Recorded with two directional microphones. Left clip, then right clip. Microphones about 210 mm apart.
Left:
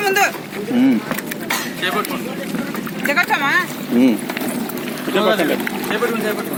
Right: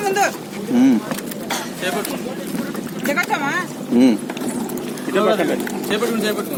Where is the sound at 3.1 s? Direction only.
10° right (ahead or behind).